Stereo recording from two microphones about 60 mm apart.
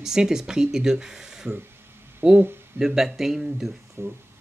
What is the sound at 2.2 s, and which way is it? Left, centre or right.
Speech, right.